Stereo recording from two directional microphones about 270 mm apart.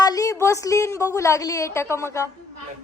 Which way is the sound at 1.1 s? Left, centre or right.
Centre.